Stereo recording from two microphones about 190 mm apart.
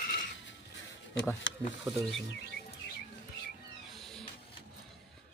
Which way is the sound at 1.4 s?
85° left.